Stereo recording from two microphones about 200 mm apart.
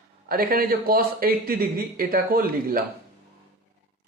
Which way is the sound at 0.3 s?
45° right (ahead or behind).